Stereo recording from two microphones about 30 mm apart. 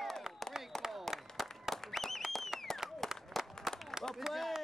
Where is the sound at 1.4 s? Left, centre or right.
Centre.